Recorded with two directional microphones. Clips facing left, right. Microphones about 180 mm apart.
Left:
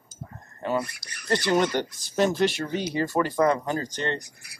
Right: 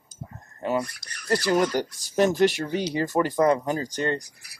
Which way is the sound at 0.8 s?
10° left (ahead or behind).